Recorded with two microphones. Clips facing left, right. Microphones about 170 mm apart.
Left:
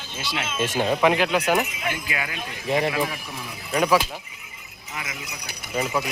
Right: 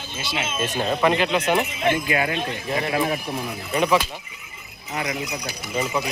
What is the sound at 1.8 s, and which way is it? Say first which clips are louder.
Speech: right 8 dB; 30° right (ahead or behind).